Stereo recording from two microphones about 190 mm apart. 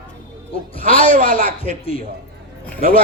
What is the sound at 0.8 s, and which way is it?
A man's voice, 30° left (ahead or behind).